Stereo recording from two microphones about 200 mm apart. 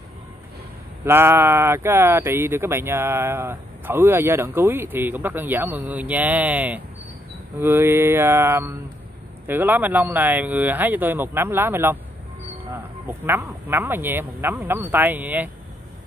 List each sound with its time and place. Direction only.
1.0 s speech: 10° right (ahead or behind)